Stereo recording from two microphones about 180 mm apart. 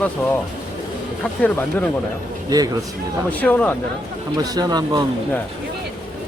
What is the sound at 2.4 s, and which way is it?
Speech, 20° right (ahead or behind).